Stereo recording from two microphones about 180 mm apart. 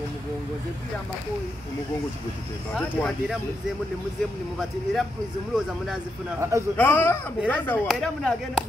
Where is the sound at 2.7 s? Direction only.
5° left (ahead or behind).